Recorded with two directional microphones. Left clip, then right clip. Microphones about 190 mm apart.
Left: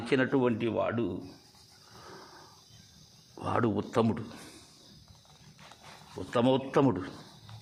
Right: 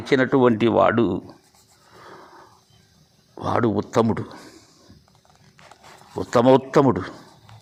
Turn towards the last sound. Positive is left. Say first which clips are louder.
# right 9 dB
turn(degrees=-30)  # may be behind; listen again after turning